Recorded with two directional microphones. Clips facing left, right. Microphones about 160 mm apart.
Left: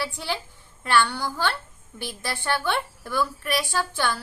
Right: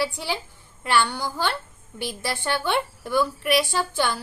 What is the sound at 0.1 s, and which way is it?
A woman's voice, 15° right (ahead or behind).